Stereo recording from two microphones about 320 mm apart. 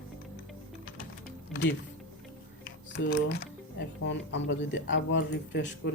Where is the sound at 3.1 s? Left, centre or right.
Left.